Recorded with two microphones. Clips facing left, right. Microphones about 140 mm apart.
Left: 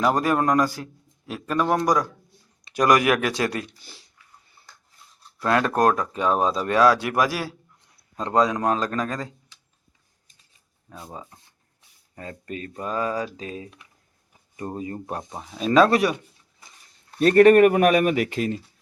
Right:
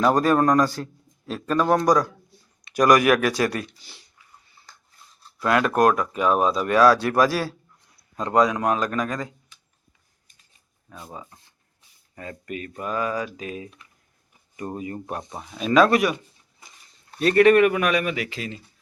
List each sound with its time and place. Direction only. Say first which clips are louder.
0.0 s a man's voice: right 2 dB; 15° left (ahead or behind)
3.8 s speech: left 2 dB; 45° left (ahead or behind)
5.4 s speech: right 1 dB; 30° left (ahead or behind); by 7.5 s 15° left (ahead or behind)
8.1 s a man's voice: right 1 dB; 30° left (ahead or behind)
11.1 s a man's voice: even; 25° left (ahead or behind)
17.2 s speech: left 2 dB; 40° left (ahead or behind)